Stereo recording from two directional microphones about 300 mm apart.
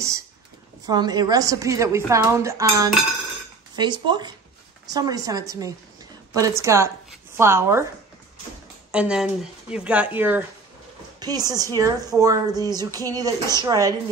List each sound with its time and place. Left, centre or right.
0.8 s a woman's voice: centre
8.9 s a woman's voice: centre